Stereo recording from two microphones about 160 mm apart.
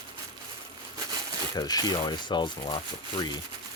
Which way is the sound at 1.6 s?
25° left (ahead or behind).